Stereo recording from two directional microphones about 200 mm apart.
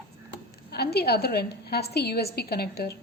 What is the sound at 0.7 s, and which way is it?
A woman's voice, 55° left (ahead or behind).